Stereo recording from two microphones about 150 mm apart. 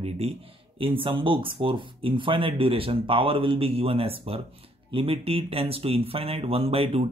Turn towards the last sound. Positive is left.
turn(degrees=-40)  # may be behind; listen again after turning